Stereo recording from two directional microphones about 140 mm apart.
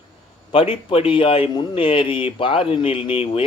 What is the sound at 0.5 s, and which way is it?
Speech, 40° left (ahead or behind).